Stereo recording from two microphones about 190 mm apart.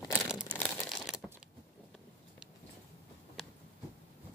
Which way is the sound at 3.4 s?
Centre (ahead or behind).